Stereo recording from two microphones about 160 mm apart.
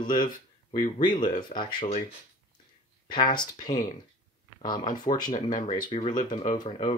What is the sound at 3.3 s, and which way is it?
Speech, 25° left (ahead or behind).